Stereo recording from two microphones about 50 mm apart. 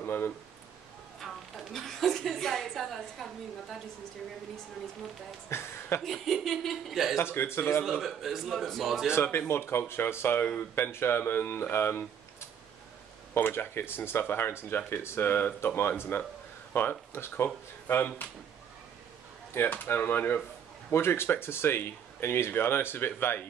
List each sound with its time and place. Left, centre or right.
0.0 s speech: left
1.2 s a woman's voice: centre
5.5 s speech: left
6.0 s a woman's voice: centre
7.2 s speech: left
7.8 s a woman's voice: centre
9.1 s speech: left
13.3 s speech: left
19.6 s speech: left
20.9 s speech: left